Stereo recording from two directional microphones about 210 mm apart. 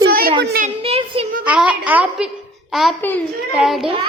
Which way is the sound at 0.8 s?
25° right (ahead or behind).